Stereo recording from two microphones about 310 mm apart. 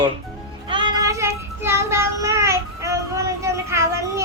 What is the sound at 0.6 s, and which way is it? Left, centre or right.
Child singing, centre.